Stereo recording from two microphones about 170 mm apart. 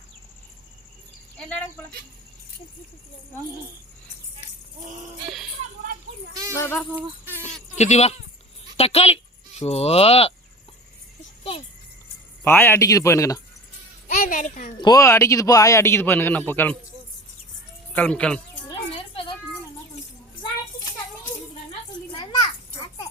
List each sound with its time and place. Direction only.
6.5 s speech: 15° left (ahead or behind)
7.8 s speech: 40° left (ahead or behind)
12.5 s speech: 15° left (ahead or behind)
14.2 s speech: 50° left (ahead or behind)
14.8 s speech: 20° left (ahead or behind)
17.9 s speech: 5° left (ahead or behind)
22.2 s children playing: 25° left (ahead or behind)